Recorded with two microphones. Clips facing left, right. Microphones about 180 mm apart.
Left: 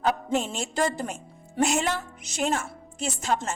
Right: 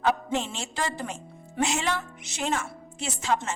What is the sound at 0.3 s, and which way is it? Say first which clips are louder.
A woman's voice: left 4 dB; 45° left (ahead or behind).